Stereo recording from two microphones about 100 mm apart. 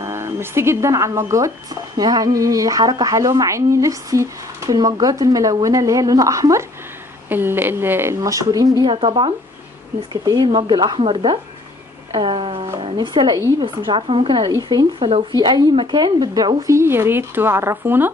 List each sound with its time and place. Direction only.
0.0 s speech: 25° right (ahead or behind)
7.2 s speech: 20° right (ahead or behind); by 8.8 s 35° right (ahead or behind)
8.8 s a woman's voice: 60° right (ahead or behind)
10.2 s speech: 40° right (ahead or behind)
10.5 s a woman's voice: 55° right (ahead or behind)
12.9 s a woman's voice: 50° right (ahead or behind)
14.7 s speech: 45° right (ahead or behind)
16.6 s speech: 25° right (ahead or behind)